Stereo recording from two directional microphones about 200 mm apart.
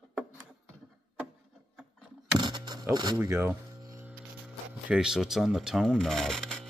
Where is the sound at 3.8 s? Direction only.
15° right (ahead or behind).